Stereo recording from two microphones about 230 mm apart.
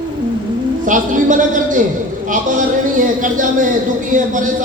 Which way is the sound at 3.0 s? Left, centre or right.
Right.